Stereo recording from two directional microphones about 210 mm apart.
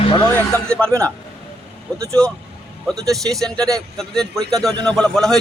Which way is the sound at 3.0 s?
Centre (ahead or behind).